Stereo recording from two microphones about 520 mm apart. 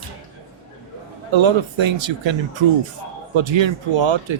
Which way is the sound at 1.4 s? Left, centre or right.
Right.